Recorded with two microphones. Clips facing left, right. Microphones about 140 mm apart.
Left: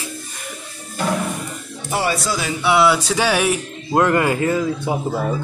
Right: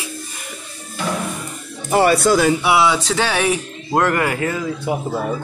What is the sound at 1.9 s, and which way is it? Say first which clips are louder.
Speech: right 7 dB; 55° right (ahead or behind).